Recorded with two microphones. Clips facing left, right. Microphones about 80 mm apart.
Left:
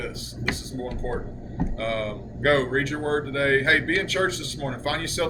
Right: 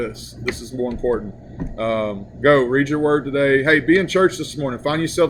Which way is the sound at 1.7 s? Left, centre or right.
Right.